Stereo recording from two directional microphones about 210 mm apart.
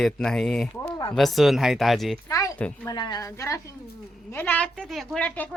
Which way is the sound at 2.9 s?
20° left (ahead or behind).